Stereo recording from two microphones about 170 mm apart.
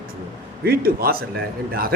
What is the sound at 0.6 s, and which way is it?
Speech, 60° right (ahead or behind).